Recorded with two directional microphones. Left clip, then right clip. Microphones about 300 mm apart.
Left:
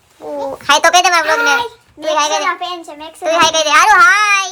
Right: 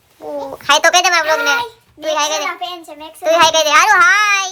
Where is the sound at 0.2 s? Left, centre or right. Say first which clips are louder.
Left 3 dB; centre.